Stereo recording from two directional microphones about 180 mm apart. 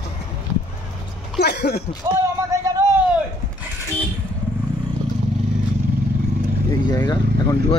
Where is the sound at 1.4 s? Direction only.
65° left (ahead or behind).